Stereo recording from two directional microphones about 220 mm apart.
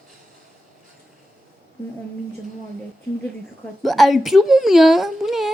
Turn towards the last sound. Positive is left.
turn(degrees=0)  # may be behind; listen again after turning